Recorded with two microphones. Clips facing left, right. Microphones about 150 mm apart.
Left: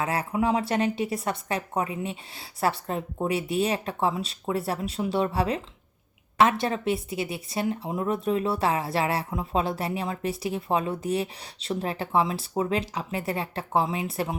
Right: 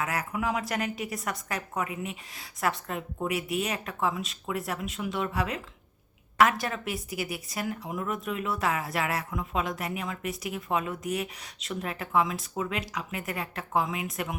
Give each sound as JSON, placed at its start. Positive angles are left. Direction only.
{"t": 0.0, "sound": "speech", "side_deg": 30}